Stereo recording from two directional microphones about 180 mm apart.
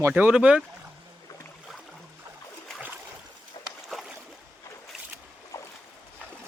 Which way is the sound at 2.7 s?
5° right (ahead or behind).